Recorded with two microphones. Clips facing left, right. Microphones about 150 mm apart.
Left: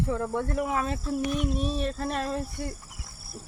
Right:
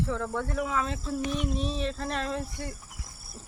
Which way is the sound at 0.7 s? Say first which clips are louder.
Left 2 dB; 50° left (ahead or behind).